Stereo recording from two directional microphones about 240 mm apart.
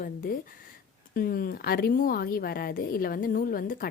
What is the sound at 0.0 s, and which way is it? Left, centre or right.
Speech, left.